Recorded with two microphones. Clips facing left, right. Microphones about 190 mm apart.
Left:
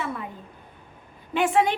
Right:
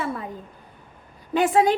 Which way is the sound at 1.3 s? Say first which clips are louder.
Right 3 dB; 35° right (ahead or behind).